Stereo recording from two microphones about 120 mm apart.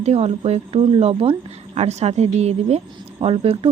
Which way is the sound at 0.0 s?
65° right (ahead or behind).